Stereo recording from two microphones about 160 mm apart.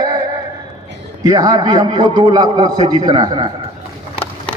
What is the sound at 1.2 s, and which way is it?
A man's voice, 25° right (ahead or behind).